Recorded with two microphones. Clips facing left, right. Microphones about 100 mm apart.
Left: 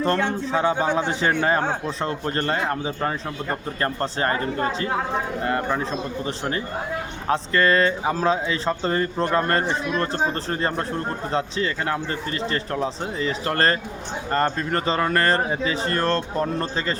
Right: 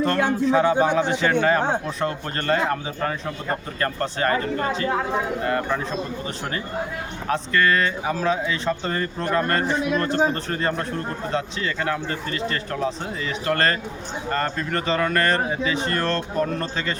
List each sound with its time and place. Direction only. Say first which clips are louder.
0.0 s speech: right 2 dB; 30° left (ahead or behind)
7.3 s speech: left 1 dB; 25° left (ahead or behind)